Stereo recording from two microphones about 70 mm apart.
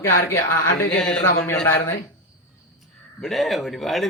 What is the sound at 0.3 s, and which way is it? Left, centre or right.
Speech, left.